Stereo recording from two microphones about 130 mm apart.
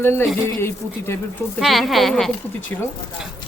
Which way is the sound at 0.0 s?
20° left (ahead or behind).